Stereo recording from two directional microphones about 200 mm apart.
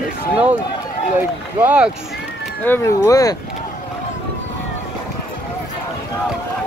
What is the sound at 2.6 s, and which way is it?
Speech, 10° left (ahead or behind).